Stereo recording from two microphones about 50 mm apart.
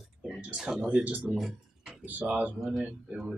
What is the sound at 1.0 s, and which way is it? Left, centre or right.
Speech, right.